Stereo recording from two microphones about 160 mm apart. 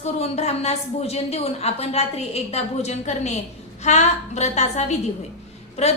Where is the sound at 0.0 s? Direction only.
40° left (ahead or behind).